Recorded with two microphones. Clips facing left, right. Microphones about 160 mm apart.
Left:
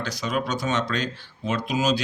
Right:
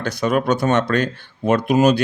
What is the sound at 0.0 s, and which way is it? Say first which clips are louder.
Speech: right 8 dB; 55° right (ahead or behind).